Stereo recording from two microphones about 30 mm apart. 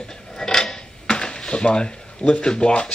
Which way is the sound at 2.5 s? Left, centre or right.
Left.